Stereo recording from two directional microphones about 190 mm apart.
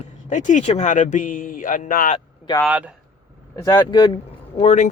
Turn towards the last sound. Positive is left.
turn(degrees=40)  # may be behind; listen again after turning